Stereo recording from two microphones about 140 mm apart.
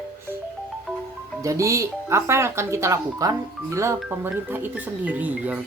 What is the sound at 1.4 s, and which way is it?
Speech, 20° right (ahead or behind).